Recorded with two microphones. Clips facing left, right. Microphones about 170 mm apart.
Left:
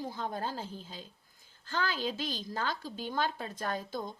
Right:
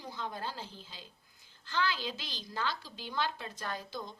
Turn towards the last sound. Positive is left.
turn(degrees=50)  # may be behind; listen again after turning